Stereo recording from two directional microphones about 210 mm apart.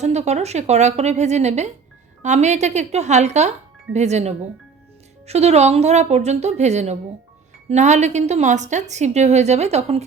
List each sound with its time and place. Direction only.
0.0 s a woman's voice: 30° right (ahead or behind)